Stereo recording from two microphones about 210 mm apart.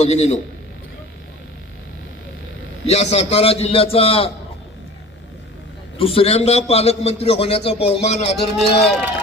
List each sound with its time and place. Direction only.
0.0 s a man's voice: 30° left (ahead or behind)
2.8 s a man's voice: 30° left (ahead or behind)
6.0 s a man's voice: 25° left (ahead or behind)